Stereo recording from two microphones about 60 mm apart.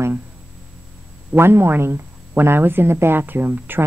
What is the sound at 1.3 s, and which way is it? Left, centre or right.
Speech, right.